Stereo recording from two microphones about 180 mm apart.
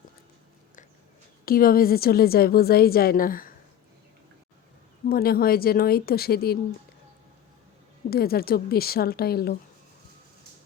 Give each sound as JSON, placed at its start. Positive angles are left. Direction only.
{"t": 1.5, "sound": "a woman's voice", "side_deg": 55}
{"t": 5.0, "sound": "a woman's voice", "side_deg": 55}
{"t": 8.1, "sound": "a woman's voice", "side_deg": 60}